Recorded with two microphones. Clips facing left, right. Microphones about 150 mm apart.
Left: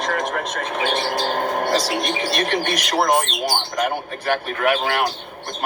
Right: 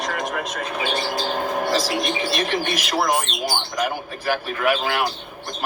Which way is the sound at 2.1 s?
45° left (ahead or behind).